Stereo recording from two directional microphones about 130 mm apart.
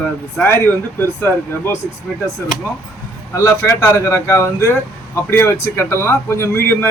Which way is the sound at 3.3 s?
25° left (ahead or behind).